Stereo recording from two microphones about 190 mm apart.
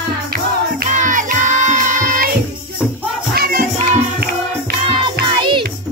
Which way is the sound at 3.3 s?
50° right (ahead or behind).